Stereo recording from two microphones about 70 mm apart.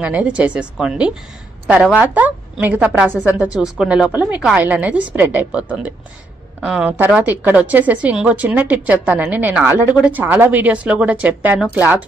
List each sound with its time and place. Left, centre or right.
0.0 s speech: centre
2.0 s speech: right
3.5 s speech: centre
4.2 s speech: right
7.2 s speech: right